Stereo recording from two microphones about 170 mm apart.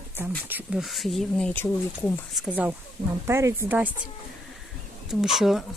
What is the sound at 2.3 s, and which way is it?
Speech, 5° right (ahead or behind).